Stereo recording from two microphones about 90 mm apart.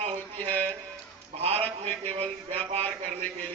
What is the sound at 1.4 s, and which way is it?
Speech, 90° right.